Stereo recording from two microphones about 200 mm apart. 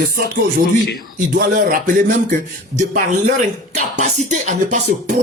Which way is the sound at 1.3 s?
45° right (ahead or behind).